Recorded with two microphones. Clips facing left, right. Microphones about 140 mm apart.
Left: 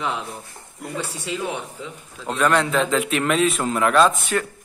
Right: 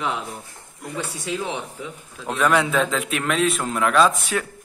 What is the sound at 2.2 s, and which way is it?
A man's voice, centre (ahead or behind).